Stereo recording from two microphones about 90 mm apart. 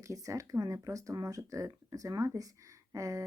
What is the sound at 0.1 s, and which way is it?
Speech, 35° right (ahead or behind).